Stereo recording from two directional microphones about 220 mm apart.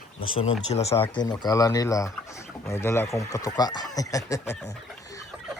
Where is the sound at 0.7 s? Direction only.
30° left (ahead or behind); by 4.7 s 10° left (ahead or behind).